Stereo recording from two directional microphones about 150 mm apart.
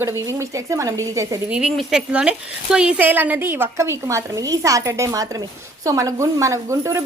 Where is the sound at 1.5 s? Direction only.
5° right (ahead or behind); by 7.0 s 20° right (ahead or behind).